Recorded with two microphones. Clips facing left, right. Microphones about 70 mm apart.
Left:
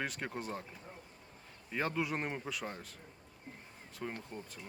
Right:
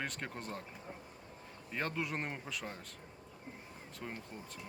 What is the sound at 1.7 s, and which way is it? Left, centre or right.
Speech, centre.